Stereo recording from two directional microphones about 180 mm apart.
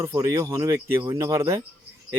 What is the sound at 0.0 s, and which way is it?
Speech, 15° right (ahead or behind).